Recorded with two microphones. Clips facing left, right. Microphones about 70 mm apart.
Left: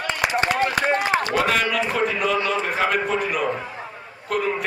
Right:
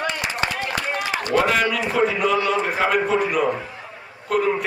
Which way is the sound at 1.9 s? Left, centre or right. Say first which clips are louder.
Right 2 dB; centre.